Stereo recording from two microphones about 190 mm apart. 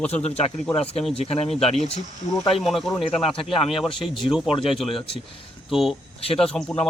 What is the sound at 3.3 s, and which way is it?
Speech, 30° left (ahead or behind).